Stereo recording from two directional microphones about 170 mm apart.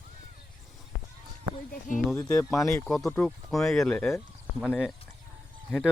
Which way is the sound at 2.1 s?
15° left (ahead or behind).